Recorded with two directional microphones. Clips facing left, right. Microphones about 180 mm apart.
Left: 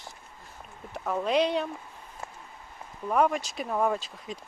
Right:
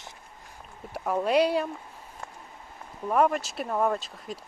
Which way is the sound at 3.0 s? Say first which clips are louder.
Right 1 dB; 5° right (ahead or behind).